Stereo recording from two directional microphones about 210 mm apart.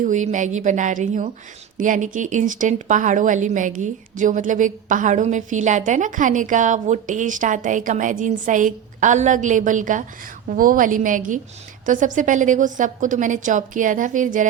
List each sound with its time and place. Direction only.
0.0 s a woman's voice: 35° right (ahead or behind)